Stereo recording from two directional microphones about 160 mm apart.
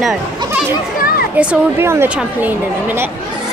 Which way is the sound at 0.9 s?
65° left (ahead or behind).